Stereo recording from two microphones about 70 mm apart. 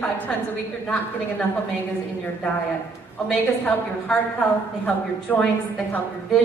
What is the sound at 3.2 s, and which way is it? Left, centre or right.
A woman's voice, centre.